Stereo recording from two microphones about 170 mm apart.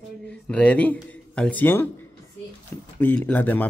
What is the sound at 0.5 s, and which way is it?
Speech, 10° left (ahead or behind).